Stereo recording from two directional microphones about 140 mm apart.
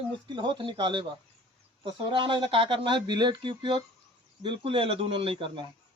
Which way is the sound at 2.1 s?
35° right (ahead or behind).